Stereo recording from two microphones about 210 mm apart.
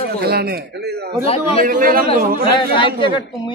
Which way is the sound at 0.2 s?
50° right (ahead or behind).